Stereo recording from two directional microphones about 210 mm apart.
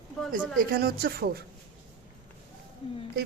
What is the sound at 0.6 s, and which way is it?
Speech, 45° right (ahead or behind).